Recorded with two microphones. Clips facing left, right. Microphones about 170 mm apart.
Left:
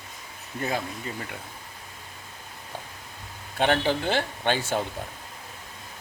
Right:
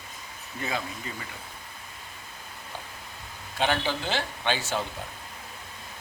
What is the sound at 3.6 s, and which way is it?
Speech, 55° left (ahead or behind).